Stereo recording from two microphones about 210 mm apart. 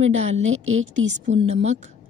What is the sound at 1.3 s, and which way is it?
Speech, 30° right (ahead or behind).